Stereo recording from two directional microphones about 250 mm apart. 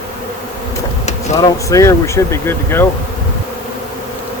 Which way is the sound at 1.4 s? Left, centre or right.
Centre.